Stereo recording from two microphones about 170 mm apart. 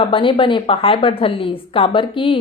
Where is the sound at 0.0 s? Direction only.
30° left (ahead or behind).